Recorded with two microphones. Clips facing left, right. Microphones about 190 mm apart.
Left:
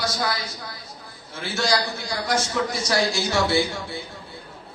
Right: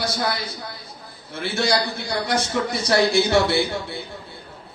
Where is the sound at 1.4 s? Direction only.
60° right (ahead or behind).